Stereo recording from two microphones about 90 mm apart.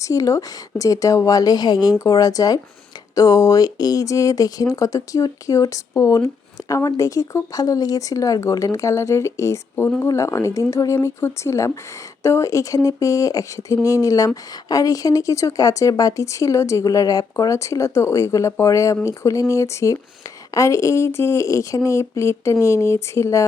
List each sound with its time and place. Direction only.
0.0 s speech: 40° left (ahead or behind)